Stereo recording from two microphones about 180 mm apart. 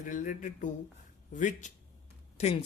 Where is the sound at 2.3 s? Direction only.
35° left (ahead or behind).